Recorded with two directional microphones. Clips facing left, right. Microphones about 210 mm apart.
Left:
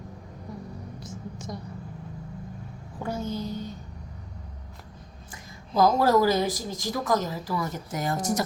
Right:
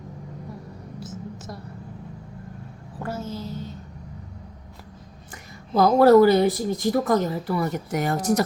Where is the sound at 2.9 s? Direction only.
5° right (ahead or behind).